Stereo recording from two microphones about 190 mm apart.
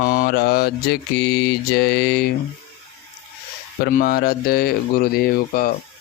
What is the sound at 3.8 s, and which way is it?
Mantra, 55° left (ahead or behind).